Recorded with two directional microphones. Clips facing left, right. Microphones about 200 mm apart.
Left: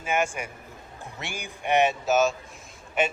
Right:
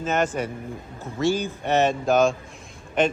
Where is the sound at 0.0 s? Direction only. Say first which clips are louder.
Right 4 dB; 10° left (ahead or behind).